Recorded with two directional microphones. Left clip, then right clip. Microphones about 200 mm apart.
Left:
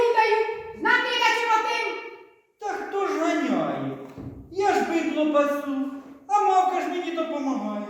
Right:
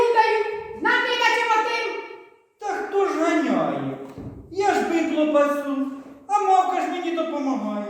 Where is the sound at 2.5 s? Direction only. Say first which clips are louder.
Right 4 dB; centre (ahead or behind).